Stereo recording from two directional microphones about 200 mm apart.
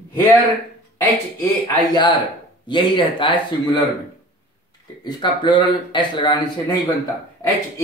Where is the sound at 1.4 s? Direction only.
20° left (ahead or behind).